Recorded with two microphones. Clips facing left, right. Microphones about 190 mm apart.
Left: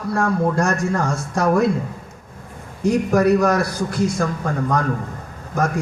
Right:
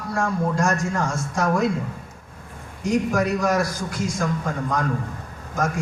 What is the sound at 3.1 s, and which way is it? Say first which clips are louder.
A man's voice: left 5 dB; 60° left (ahead or behind).